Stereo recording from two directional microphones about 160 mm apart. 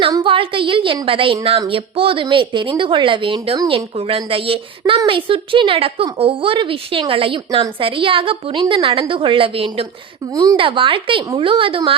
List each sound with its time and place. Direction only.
0.1 s a woman's voice: 30° right (ahead or behind)
10.3 s speech: 20° right (ahead or behind)
10.6 s a woman's voice: 30° right (ahead or behind)